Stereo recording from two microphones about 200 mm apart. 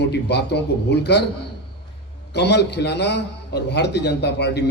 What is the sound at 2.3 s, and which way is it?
A man's voice, 60° left (ahead or behind).